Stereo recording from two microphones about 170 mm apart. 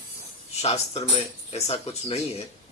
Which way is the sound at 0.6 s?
40° left (ahead or behind).